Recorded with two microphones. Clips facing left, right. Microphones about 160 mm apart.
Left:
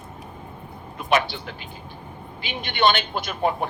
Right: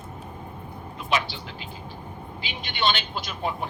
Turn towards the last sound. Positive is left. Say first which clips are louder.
# left 6 dB
turn(degrees=55)  # may be behind; listen again after turning